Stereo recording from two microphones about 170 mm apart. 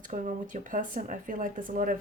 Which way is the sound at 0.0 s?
50° right (ahead or behind).